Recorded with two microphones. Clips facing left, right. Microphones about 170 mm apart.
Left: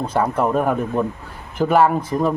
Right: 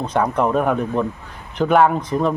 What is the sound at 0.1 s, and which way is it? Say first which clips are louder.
Speech: right 1 dB; 5° left (ahead or behind).